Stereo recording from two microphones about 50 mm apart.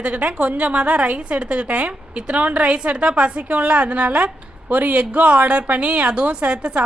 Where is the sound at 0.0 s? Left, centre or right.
Right.